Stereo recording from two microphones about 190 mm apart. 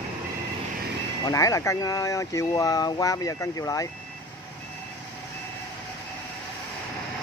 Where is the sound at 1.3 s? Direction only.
15° left (ahead or behind).